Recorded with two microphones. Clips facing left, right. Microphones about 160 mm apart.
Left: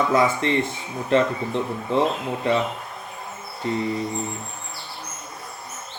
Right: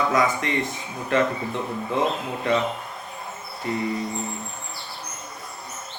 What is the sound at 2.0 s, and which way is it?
Speech, 30° left (ahead or behind).